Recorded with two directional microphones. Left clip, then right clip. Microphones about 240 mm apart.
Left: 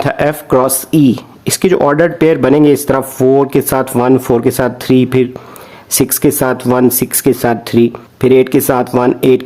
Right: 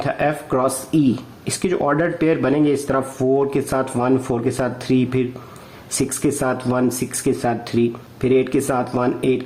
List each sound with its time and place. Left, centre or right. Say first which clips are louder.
0.0 s speech: left 7 dB; left